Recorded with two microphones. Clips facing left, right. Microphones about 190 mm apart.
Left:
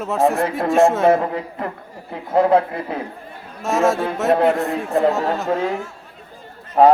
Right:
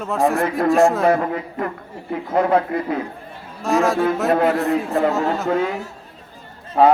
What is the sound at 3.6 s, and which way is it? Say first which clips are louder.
A man's voice: even; centre (ahead or behind).